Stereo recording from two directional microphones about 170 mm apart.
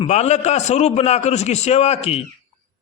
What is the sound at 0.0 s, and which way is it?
A man's voice, 40° left (ahead or behind).